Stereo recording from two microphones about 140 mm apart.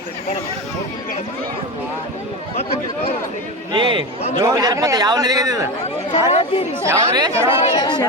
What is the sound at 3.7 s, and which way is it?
Speech, 35° right (ahead or behind).